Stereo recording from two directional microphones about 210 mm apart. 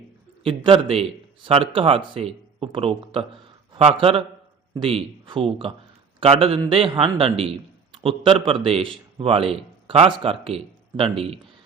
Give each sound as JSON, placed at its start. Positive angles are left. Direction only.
{"t": 0.4, "sound": "a man's voice", "side_deg": -25}